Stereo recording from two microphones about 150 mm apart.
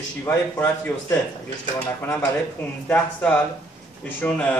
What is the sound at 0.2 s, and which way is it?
Speech, 15° left (ahead or behind).